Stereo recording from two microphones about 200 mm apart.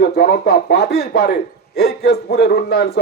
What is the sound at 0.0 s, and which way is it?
A man's voice, 55° left (ahead or behind).